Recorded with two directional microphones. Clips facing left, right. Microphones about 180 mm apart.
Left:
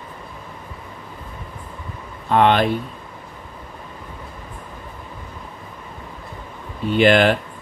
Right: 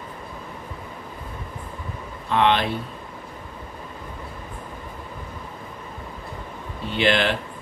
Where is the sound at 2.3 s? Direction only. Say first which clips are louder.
Left 4 dB; 50° left (ahead or behind).